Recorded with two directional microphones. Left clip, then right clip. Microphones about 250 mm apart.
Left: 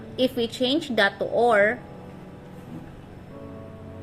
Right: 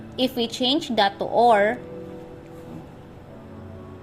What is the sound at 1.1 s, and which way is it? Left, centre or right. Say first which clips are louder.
Speech: right 3 dB; right.